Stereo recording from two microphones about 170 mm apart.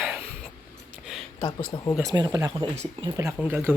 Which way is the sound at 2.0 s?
20° right (ahead or behind).